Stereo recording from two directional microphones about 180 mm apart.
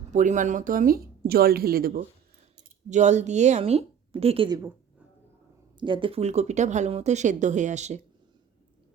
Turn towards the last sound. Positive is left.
turn(degrees=-40)  # may be behind; listen again after turning